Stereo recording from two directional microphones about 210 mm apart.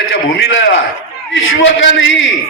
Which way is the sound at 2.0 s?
65° left (ahead or behind).